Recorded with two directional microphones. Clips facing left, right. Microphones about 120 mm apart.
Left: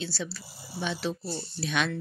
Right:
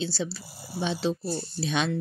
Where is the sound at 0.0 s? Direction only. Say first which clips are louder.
Right 4 dB; 25° right (ahead or behind).